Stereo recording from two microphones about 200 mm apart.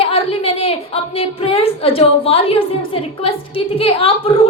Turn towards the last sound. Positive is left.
turn(degrees=30)  # may be behind; listen again after turning